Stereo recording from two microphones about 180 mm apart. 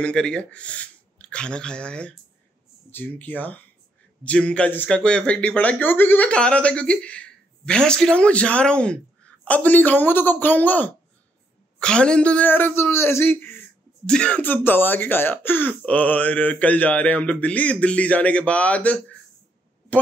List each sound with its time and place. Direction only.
0.0 s speech: 5° left (ahead or behind)